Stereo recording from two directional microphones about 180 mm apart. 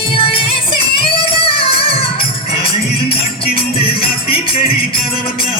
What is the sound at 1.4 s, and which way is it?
Music, 30° left (ahead or behind).